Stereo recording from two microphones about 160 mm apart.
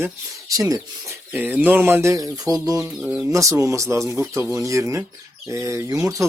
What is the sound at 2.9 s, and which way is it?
Speech, 5° right (ahead or behind).